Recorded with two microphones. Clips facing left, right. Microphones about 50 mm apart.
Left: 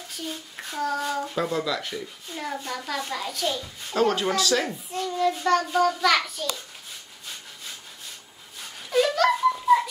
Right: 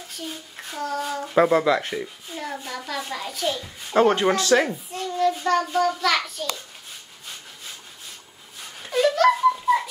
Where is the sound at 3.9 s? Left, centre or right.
Right.